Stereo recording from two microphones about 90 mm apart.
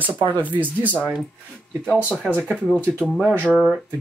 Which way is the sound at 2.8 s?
25° right (ahead or behind).